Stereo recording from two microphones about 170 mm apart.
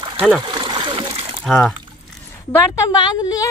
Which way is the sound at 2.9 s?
20° left (ahead or behind).